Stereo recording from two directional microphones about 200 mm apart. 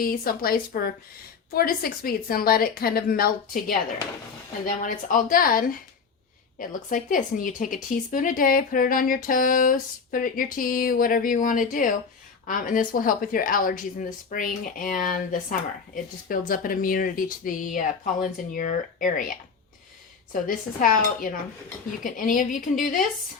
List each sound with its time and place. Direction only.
0.0 s speech: 45° left (ahead or behind)
20.3 s speech: 45° left (ahead or behind)